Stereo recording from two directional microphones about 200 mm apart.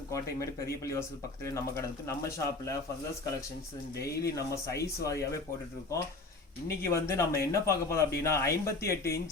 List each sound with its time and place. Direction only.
0.1 s speech: 15° left (ahead or behind)
3.9 s speech: 15° left (ahead or behind)
6.8 s speech: 15° left (ahead or behind)